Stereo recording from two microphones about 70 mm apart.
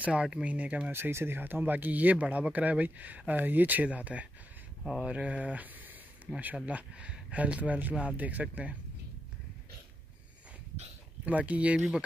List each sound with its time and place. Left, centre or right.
0.0 s speech: centre
0.9 s speech: right
7.9 s speech: centre
8.2 s speech: right
11.2 s speech: right